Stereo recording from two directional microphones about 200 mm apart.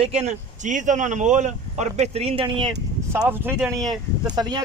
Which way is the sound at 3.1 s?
10° right (ahead or behind).